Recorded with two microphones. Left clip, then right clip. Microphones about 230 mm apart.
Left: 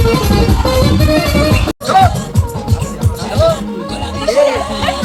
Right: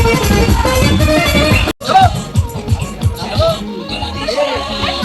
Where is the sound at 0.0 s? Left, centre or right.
Right.